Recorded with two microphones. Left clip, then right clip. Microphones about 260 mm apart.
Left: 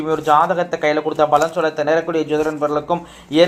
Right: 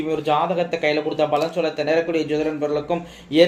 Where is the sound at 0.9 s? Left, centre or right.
Left.